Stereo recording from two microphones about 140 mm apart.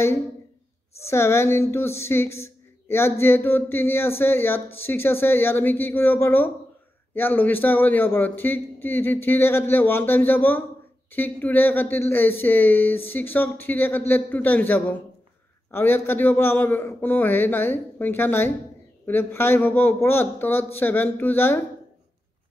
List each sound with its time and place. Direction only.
1.0 s speech: 20° left (ahead or behind)